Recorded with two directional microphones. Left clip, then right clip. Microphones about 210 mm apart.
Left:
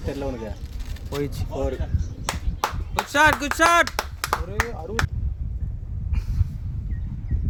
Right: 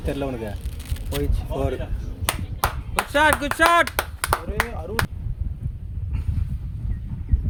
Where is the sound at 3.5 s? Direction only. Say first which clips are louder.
Right 1 dB; 25° left (ahead or behind).